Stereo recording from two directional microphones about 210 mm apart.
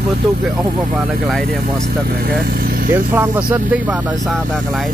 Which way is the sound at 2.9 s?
10° right (ahead or behind).